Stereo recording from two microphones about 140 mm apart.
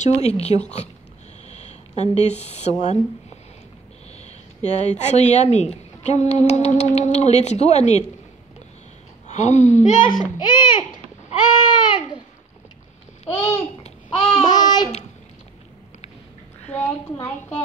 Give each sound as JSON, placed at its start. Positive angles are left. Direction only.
{"t": 0.0, "sound": "speech", "side_deg": 50}
{"t": 9.3, "sound": "speech", "side_deg": 55}
{"t": 10.4, "sound": "speech", "side_deg": 30}
{"t": 11.6, "sound": "a sound", "side_deg": 30}
{"t": 13.4, "sound": "babbling", "side_deg": 50}
{"t": 14.4, "sound": "a sound", "side_deg": 30}
{"t": 16.7, "sound": "a woman's voice", "side_deg": 10}